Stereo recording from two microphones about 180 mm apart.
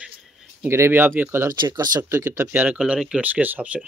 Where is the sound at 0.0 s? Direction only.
5° right (ahead or behind).